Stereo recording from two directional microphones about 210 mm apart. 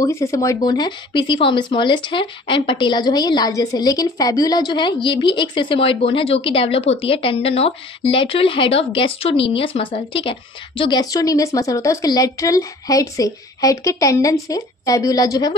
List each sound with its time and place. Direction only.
0.0 s a woman's voice: 15° left (ahead or behind)